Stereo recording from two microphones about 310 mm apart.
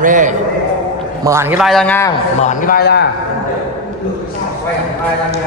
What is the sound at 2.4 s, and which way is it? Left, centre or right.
Speech, left.